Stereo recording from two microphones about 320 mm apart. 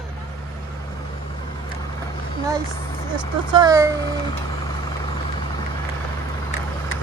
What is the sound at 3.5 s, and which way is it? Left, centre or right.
Speech, centre.